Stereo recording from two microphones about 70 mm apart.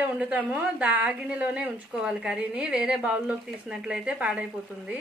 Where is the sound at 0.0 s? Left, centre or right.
Right.